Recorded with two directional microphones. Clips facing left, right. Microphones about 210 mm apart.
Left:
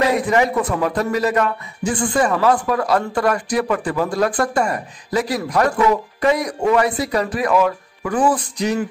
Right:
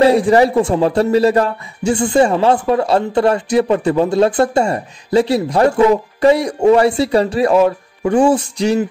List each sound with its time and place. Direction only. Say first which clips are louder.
0.0 s speech: right 6 dB; 30° right (ahead or behind)